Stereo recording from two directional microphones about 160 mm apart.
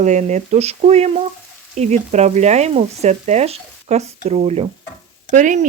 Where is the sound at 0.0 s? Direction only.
50° right (ahead or behind).